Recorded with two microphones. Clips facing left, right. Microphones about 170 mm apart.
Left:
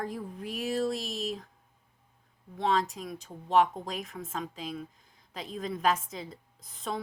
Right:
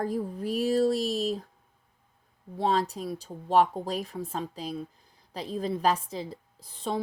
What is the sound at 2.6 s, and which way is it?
A woman's voice, 35° right (ahead or behind).